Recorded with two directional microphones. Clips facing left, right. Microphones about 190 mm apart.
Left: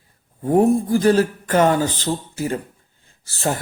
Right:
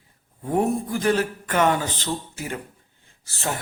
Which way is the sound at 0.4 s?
35° left (ahead or behind).